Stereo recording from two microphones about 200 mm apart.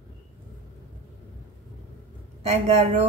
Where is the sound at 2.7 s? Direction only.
35° right (ahead or behind).